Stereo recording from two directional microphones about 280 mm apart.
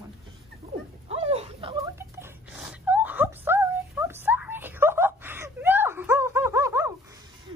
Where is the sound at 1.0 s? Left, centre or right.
Right.